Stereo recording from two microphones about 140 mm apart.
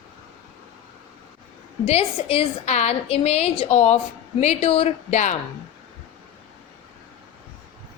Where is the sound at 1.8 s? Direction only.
45° left (ahead or behind).